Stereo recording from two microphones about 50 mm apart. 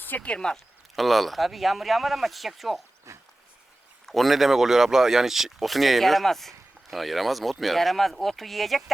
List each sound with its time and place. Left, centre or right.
0.2 s speech: centre
0.9 s speech: centre
3.1 s dog: right
4.0 s speech: centre